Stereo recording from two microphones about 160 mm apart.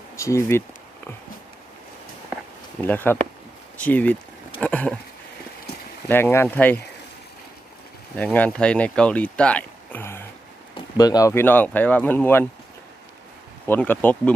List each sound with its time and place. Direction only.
0.2 s speech: 20° left (ahead or behind)
2.8 s speech: 10° left (ahead or behind)
6.1 s speech: 15° left (ahead or behind)
8.1 s speech: 10° left (ahead or behind)
10.8 s speech: 25° left (ahead or behind)
13.7 s speech: 10° left (ahead or behind)